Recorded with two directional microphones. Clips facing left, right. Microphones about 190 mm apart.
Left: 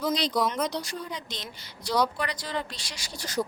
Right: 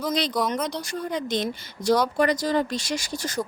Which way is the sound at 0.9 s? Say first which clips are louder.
Right 8 dB; 50° right (ahead or behind).